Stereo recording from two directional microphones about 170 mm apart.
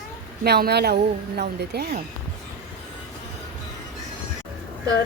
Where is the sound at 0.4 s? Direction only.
75° right (ahead or behind).